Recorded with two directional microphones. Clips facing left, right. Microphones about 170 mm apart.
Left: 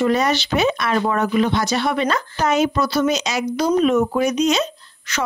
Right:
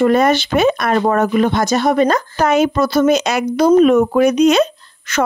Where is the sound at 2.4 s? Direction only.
55° right (ahead or behind).